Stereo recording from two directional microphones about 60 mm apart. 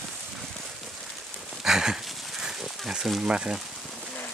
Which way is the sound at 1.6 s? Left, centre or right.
Centre.